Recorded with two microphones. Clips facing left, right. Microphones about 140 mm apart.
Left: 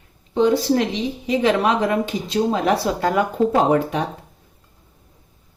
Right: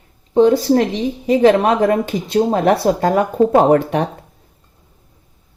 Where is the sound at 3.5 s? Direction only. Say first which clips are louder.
Right 5 dB; 55° right (ahead or behind).